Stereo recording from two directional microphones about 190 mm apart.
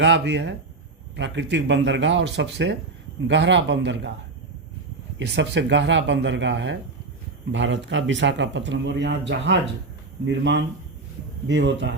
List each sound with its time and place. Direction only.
0.0 s speech: 70° right (ahead or behind)
5.2 s speech: 65° right (ahead or behind)